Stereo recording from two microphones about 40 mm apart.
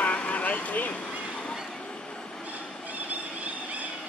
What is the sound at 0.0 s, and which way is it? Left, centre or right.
Vehicle, left.